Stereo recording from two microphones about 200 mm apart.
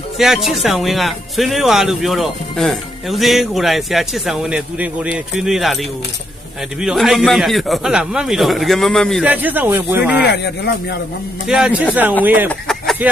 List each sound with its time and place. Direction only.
0.2 s speech: centre (ahead or behind)
9.2 s speech: 10° right (ahead or behind)
10.3 s speech: 55° left (ahead or behind)
11.4 s speech: 5° right (ahead or behind)
12.5 s a sound: centre (ahead or behind)